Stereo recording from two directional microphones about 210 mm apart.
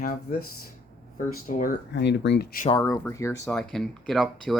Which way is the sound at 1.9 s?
55° left (ahead or behind).